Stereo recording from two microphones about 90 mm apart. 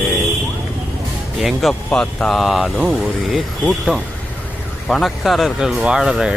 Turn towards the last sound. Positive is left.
turn(degrees=-5)  # may be behind; listen again after turning